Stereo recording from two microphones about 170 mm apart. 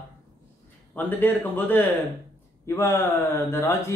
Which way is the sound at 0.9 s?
10° left (ahead or behind).